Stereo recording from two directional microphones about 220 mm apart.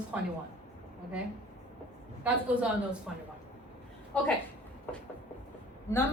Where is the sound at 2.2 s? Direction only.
5° right (ahead or behind).